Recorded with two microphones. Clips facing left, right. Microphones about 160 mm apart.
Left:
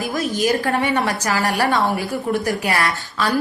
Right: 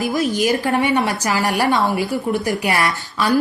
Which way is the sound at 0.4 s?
20° right (ahead or behind).